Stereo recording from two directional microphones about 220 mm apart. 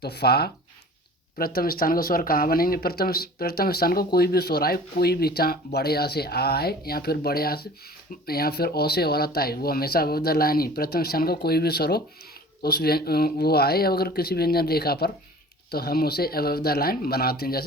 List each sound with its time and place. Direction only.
0.0 s speech: 45° left (ahead or behind)